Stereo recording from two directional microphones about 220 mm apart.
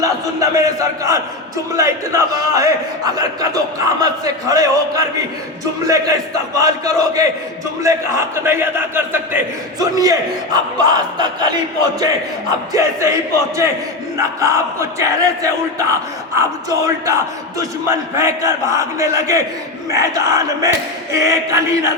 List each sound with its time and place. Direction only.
0.0 s a man's voice: 15° right (ahead or behind)
14.5 s a man's voice: 15° right (ahead or behind)